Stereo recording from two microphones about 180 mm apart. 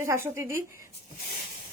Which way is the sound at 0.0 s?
15° right (ahead or behind).